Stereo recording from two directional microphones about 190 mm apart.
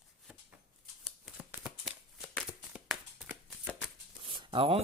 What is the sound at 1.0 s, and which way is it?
Shuffling cards, 5° right (ahead or behind).